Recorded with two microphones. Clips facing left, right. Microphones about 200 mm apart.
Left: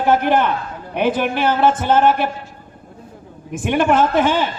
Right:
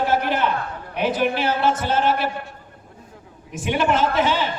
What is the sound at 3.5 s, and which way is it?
Speech, 50° left (ahead or behind).